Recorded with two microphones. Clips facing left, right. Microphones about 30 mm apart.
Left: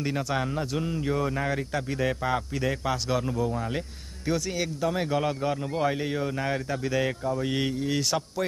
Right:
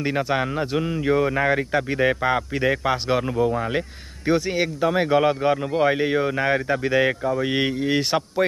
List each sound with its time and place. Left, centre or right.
0.0 s a man's voice: right